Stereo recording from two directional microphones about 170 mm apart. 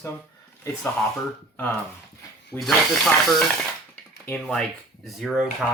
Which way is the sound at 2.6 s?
Centre (ahead or behind).